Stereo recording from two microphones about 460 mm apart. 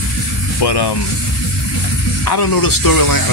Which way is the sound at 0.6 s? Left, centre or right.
Left.